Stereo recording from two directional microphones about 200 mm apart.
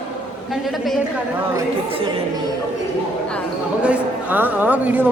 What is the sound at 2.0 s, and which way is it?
Speech, 25° right (ahead or behind).